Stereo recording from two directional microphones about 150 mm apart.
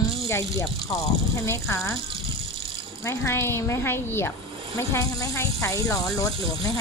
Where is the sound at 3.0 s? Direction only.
20° left (ahead or behind).